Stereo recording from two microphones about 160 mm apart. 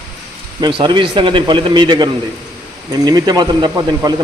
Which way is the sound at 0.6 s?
30° right (ahead or behind).